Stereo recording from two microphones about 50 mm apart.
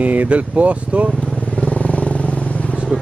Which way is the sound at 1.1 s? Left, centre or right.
Left.